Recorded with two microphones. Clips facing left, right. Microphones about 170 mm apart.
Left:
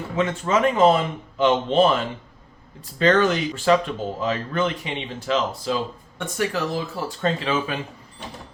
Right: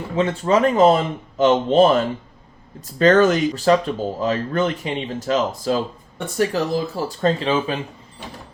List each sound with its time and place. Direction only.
0.2 s speech: 35° right (ahead or behind)